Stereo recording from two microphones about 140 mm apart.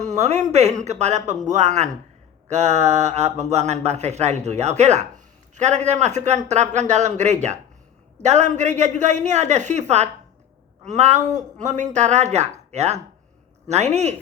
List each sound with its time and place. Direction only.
0.0 s speech: 60° right (ahead or behind)